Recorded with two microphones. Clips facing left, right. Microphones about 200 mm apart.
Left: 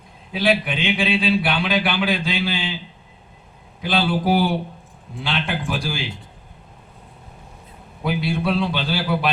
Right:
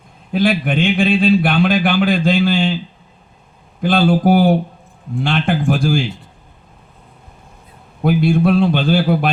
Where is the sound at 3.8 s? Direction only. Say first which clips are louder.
Right 7 dB; 50° right (ahead or behind).